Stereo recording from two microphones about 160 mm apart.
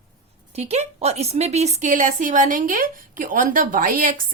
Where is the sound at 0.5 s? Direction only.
40° right (ahead or behind).